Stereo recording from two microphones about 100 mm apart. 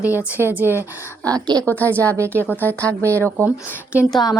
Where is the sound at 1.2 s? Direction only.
40° right (ahead or behind).